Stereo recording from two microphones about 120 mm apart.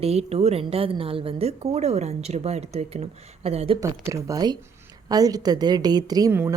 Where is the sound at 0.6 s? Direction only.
50° right (ahead or behind).